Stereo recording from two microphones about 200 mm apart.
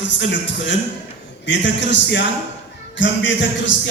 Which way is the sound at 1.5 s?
65° left (ahead or behind).